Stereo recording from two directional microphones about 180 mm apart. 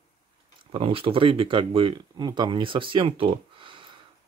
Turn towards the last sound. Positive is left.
turn(degrees=-30)  # may be behind; listen again after turning